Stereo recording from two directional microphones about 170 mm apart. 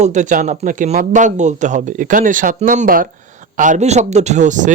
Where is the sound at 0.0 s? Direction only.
45° right (ahead or behind).